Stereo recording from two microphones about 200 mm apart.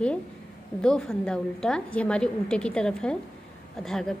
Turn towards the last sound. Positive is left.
turn(degrees=0)  # may be behind; listen again after turning